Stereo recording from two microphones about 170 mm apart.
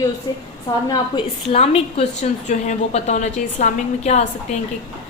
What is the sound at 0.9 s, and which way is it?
A woman's voice, 30° left (ahead or behind).